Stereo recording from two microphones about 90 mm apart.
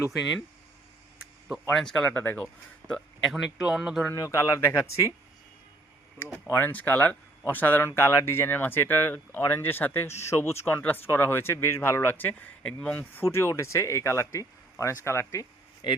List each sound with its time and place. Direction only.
0.0 s speech: centre (ahead or behind)
1.7 s speech: 10° left (ahead or behind)
2.0 s speech: 20° left (ahead or behind)
2.4 s speech: 5° left (ahead or behind)
4.1 s speech: 35° left (ahead or behind)
6.5 s speech: 20° left (ahead or behind)
13.2 s speech: 30° left (ahead or behind)
15.8 s speech: 60° left (ahead or behind)